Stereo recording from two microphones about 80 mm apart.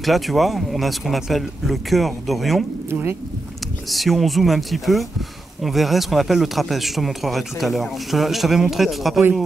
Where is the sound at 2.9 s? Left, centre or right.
Right.